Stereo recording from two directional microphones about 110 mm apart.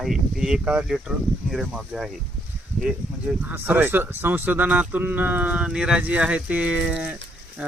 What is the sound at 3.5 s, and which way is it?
Speech, 15° right (ahead or behind).